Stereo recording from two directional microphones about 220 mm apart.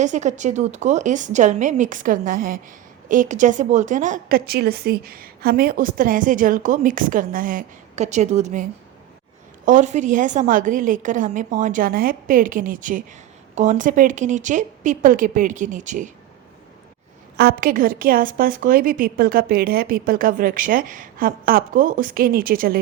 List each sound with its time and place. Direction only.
0.0 s a woman's voice: 35° right (ahead or behind)
9.6 s a woman's voice: 35° right (ahead or behind)
17.3 s a woman's voice: 40° right (ahead or behind)